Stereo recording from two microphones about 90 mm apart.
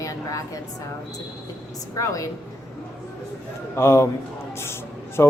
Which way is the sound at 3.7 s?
30° left (ahead or behind).